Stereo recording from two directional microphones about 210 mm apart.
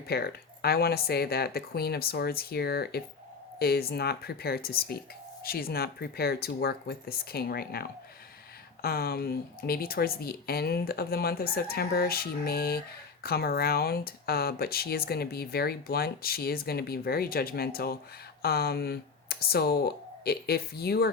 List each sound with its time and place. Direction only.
0.1 s speech: 50° left (ahead or behind)